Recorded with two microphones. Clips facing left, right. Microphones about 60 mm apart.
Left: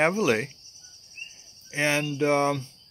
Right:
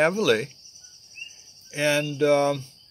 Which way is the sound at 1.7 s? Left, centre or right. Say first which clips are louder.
Right 2 dB; left.